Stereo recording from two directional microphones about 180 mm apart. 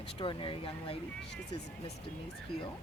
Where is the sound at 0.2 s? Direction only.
30° left (ahead or behind).